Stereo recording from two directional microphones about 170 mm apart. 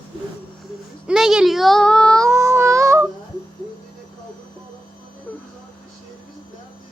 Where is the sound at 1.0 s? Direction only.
Centre (ahead or behind).